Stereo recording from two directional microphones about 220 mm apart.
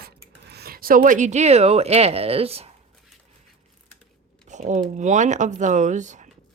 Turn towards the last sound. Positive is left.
turn(degrees=-35)  # may be behind; listen again after turning